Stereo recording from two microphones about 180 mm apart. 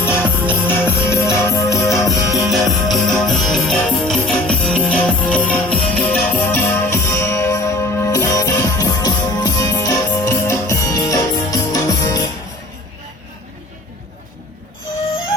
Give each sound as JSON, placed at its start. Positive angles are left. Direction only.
{"t": 0.1, "sound": "music", "side_deg": -10}
{"t": 1.0, "sound": "music", "side_deg": 15}
{"t": 2.0, "sound": "music", "side_deg": 0}